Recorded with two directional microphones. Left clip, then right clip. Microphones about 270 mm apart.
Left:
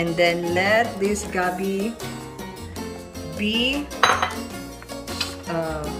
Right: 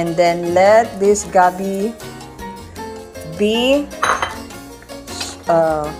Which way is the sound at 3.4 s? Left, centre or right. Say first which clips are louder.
Right 8 dB; centre.